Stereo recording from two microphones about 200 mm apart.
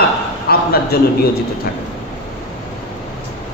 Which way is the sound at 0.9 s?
50° left (ahead or behind).